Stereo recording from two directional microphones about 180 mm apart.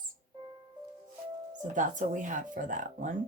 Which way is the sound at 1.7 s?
45° right (ahead or behind).